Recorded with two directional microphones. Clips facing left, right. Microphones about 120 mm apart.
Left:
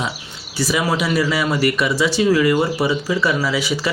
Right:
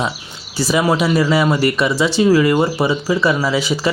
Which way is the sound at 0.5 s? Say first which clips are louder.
Right 4 dB; 30° right (ahead or behind).